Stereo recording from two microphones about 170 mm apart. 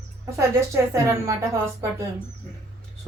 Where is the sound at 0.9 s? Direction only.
15° right (ahead or behind).